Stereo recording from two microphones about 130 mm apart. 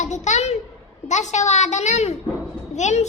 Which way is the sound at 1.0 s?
65° left (ahead or behind).